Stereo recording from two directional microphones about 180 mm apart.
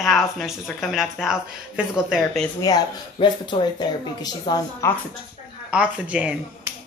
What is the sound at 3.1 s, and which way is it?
Speech, 25° left (ahead or behind).